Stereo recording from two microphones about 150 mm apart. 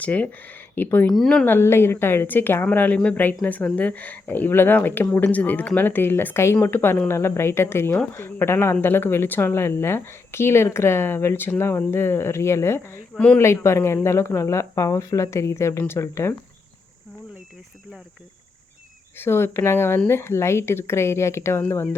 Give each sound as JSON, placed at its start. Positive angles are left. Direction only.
{"t": 0.0, "sound": "speech", "side_deg": 10}
{"t": 1.1, "sound": "speech", "side_deg": 0}
{"t": 1.5, "sound": "speech", "side_deg": 15}
{"t": 13.4, "sound": "speech", "side_deg": 20}
{"t": 19.1, "sound": "speech", "side_deg": 15}